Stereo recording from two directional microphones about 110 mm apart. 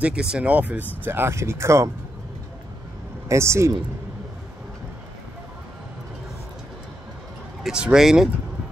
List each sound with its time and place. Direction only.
0.0 s speech: 10° right (ahead or behind); by 1.9 s 25° right (ahead or behind)
3.3 s speech: 25° right (ahead or behind)
7.6 s speech: 5° right (ahead or behind)